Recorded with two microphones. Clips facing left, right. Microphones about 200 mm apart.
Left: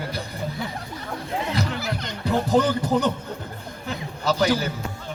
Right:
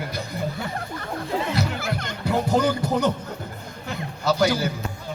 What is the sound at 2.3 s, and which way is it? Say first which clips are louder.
Speech: left 1 dB; 10° right (ahead or behind).